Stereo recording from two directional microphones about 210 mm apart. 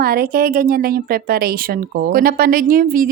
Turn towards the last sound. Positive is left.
turn(degrees=-40)  # may be behind; listen again after turning